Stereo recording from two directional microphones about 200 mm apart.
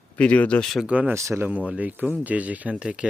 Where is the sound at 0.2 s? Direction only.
5° left (ahead or behind).